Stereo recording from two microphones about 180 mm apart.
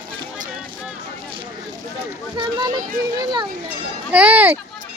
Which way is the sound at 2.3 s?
25° right (ahead or behind).